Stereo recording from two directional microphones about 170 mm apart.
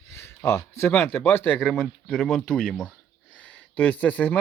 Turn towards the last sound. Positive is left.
turn(degrees=10)  # may be behind; listen again after turning